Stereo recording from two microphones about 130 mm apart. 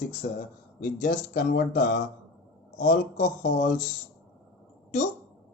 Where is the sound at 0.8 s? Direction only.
75° left (ahead or behind).